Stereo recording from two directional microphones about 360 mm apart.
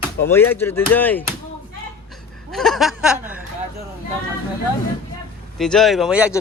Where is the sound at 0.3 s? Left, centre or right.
Centre.